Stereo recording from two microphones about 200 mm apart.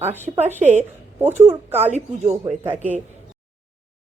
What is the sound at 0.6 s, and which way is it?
Speech, 35° right (ahead or behind).